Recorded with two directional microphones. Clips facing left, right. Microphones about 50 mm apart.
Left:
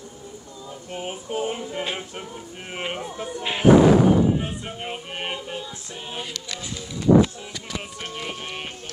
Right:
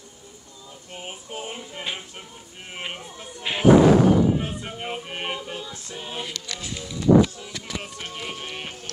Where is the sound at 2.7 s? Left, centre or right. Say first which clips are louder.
Left 5 dB; left.